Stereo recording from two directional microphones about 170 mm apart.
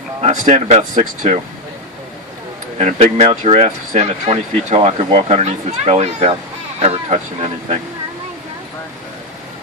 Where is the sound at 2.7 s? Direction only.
40° right (ahead or behind).